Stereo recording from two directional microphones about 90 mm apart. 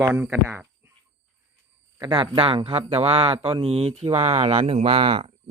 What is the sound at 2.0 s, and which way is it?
Speech, 50° right (ahead or behind).